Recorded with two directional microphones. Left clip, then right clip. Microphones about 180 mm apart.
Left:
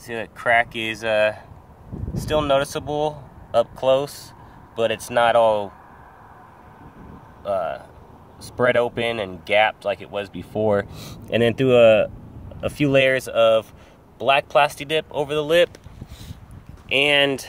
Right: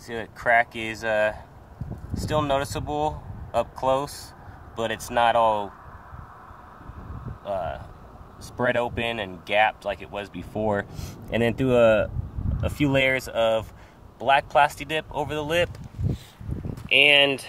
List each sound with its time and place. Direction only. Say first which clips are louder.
0.0 s speech: left 3 dB; 30° left (ahead or behind)
2.3 s speech: left 5 dB; 30° left (ahead or behind)
3.5 s speech: left 5 dB; 15° left (ahead or behind)
4.7 s speech: left 4 dB; 30° left (ahead or behind)
7.4 s speech: left 5 dB; 30° left (ahead or behind)
16.9 s speech: right 1 dB; 35° left (ahead or behind)